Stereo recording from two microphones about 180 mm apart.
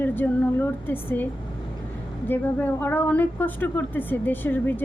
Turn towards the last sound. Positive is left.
turn(degrees=10)  # may be behind; listen again after turning